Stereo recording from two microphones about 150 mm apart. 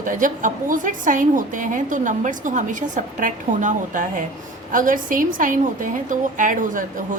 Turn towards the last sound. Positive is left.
turn(degrees=-60)  # may be behind; listen again after turning